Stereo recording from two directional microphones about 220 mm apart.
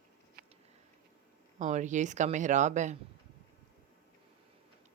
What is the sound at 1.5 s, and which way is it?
Speech, 35° right (ahead or behind).